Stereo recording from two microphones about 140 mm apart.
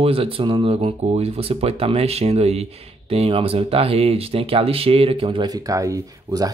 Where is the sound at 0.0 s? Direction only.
40° right (ahead or behind).